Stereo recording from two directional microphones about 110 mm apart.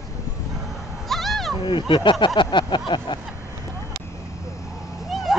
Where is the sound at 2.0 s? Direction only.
45° left (ahead or behind).